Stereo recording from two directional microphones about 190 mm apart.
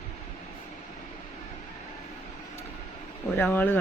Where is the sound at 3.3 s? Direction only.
10° left (ahead or behind).